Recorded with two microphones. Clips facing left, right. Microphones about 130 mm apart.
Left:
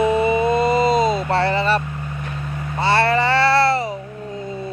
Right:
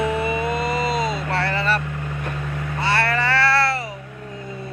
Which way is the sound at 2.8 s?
25° left (ahead or behind).